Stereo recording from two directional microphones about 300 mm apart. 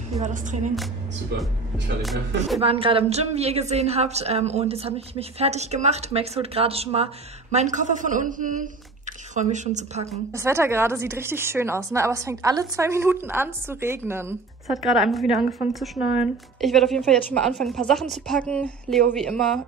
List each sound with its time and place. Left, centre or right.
0.1 s a woman's voice: right
2.0 s speech: centre
2.6 s a woman's voice: centre
10.3 s a woman's voice: centre